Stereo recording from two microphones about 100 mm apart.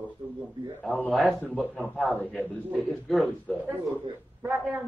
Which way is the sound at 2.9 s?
Centre (ahead or behind).